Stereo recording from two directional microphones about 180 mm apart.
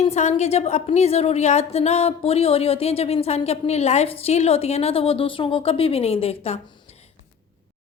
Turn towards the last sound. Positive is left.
turn(degrees=35)  # may be behind; listen again after turning